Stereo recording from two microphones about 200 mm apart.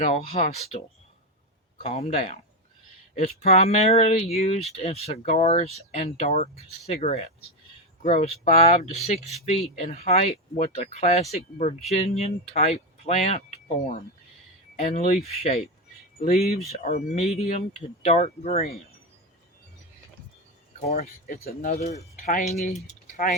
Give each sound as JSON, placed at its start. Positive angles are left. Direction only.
{"t": 0.0, "sound": "speech", "side_deg": 45}
{"t": 0.4, "sound": "speech", "side_deg": 30}
{"t": 1.9, "sound": "speech", "side_deg": 30}
{"t": 16.2, "sound": "speech", "side_deg": 50}
{"t": 16.7, "sound": "speech", "side_deg": 35}
{"t": 20.8, "sound": "speech", "side_deg": 35}